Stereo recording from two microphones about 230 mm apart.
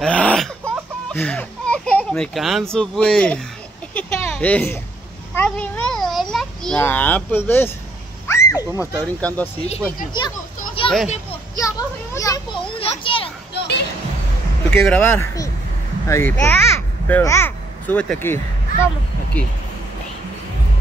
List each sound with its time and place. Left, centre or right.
0.0 s a sound: centre
1.1 s a child's voice: centre
3.9 s a sound: centre
8.3 s horse: centre
9.0 s speech: centre
10.8 s children playing: left
13.6 s music: left
14.7 s a child's voice: centre